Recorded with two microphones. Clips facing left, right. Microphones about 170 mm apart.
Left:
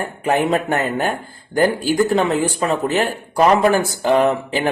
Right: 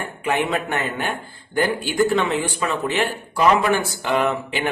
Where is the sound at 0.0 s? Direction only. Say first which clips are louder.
Left 4 dB; 40° left (ahead or behind).